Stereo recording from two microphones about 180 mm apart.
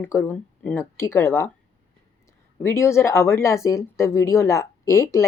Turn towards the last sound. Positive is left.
turn(degrees=15)  # may be behind; listen again after turning